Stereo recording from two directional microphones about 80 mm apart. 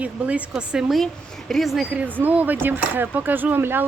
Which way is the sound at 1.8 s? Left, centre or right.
Centre.